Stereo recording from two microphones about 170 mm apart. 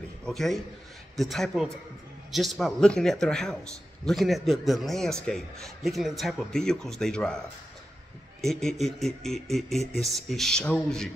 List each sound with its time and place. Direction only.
0.2 s a man's voice: centre (ahead or behind)
8.4 s a man's voice: 5° left (ahead or behind)